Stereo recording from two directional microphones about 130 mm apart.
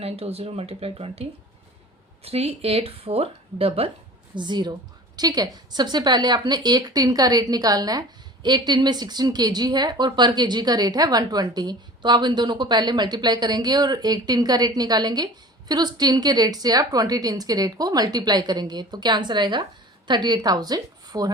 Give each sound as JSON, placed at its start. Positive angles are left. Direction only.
{"t": 0.0, "sound": "speech", "side_deg": -50}
{"t": 4.4, "sound": "a woman's voice", "side_deg": -35}